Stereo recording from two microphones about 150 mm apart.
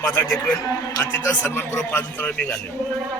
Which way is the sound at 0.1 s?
20° left (ahead or behind).